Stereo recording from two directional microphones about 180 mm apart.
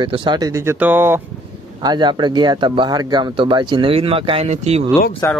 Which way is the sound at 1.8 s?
25° right (ahead or behind).